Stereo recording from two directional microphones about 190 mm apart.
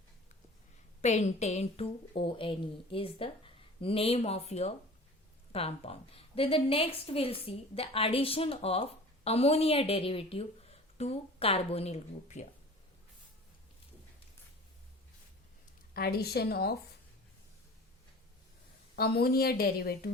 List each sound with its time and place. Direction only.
1.0 s a woman's voice: 35° left (ahead or behind)
16.0 s a woman's voice: 55° left (ahead or behind)
18.9 s a woman's voice: 55° left (ahead or behind)